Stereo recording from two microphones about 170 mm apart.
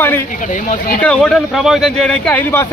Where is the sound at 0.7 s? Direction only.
50° left (ahead or behind).